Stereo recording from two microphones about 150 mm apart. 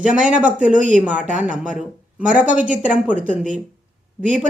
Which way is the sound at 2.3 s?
10° right (ahead or behind).